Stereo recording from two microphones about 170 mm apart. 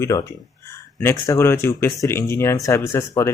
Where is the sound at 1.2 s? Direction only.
15° left (ahead or behind).